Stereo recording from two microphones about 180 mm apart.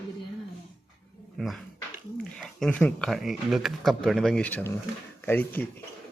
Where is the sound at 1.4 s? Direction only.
Centre (ahead or behind).